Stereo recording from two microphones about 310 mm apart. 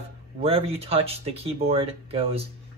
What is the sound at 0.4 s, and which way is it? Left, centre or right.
Speech, centre.